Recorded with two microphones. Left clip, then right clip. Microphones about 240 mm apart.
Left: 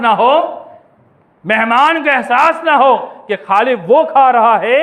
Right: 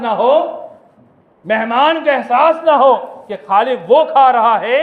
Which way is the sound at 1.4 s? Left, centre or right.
Left.